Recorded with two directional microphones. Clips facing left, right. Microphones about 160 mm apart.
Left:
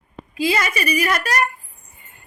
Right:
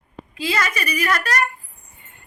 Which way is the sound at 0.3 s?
15° left (ahead or behind).